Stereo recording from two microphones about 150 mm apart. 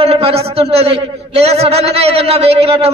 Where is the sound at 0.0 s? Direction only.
40° right (ahead or behind).